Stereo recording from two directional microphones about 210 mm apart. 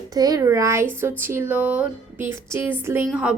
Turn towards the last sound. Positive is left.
turn(degrees=-5)  # may be behind; listen again after turning